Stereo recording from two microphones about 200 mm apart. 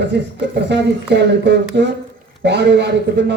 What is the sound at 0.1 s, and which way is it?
A man's voice, 60° right (ahead or behind).